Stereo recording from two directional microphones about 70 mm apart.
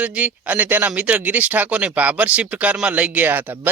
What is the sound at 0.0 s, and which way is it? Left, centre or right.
Speech, centre.